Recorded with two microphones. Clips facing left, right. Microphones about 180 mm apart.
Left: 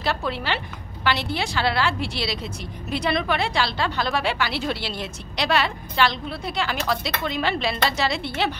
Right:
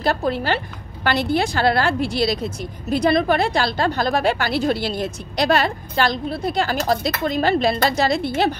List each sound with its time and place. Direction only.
0.0 s a woman's voice: 45° right (ahead or behind)